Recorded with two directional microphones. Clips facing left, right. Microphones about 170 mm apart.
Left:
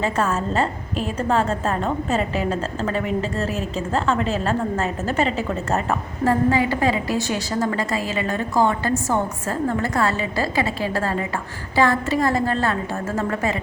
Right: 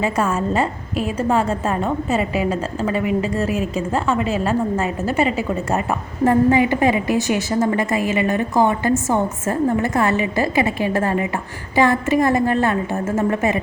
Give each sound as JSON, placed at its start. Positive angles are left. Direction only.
{"t": 0.0, "sound": "a woman's voice", "side_deg": -10}